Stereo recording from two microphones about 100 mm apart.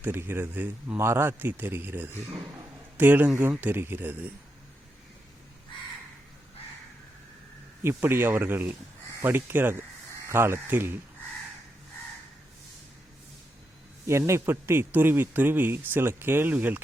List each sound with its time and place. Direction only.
0.0 s speech: 20° right (ahead or behind)
7.9 s speech: 20° right (ahead or behind)
14.1 s speech: 25° right (ahead or behind)